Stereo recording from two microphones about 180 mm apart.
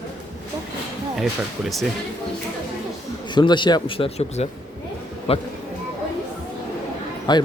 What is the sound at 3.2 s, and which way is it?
Speech, 25° left (ahead or behind).